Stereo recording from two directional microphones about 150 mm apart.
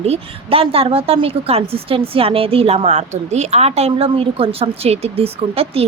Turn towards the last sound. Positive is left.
turn(degrees=-40)  # may be behind; listen again after turning